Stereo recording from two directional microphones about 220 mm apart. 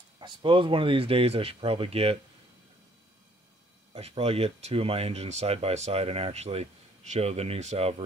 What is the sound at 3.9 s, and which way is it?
Speech, 25° right (ahead or behind).